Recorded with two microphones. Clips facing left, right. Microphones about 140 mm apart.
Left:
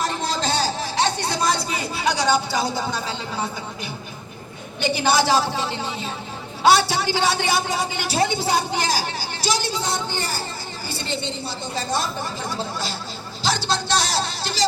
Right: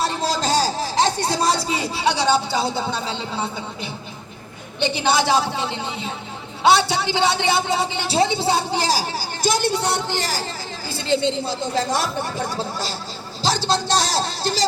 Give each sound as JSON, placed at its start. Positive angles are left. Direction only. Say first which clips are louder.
{"t": 0.0, "sound": "a sound", "louder": "right 2 dB", "side_deg": -35}
{"t": 1.3, "sound": "a woman's voice", "louder": "right 2 dB", "side_deg": -25}
{"t": 9.4, "sound": "speech", "louder": "right 4 dB", "side_deg": -55}
{"t": 11.7, "sound": "speech", "louder": "right 2 dB", "side_deg": -85}
{"t": 13.7, "sound": "speech", "louder": "right 2 dB", "side_deg": -40}